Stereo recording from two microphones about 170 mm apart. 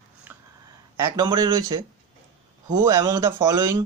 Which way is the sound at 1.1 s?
25° right (ahead or behind).